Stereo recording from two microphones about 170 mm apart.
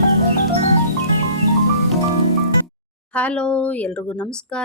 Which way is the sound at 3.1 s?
5° left (ahead or behind).